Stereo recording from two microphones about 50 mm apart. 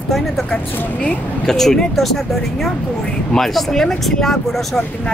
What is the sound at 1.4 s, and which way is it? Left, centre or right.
Speech, centre.